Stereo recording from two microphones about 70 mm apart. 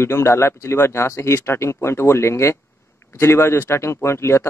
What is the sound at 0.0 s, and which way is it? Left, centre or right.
Speech, left.